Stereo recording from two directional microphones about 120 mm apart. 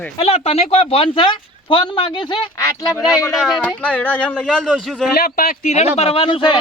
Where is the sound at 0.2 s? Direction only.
60° left (ahead or behind).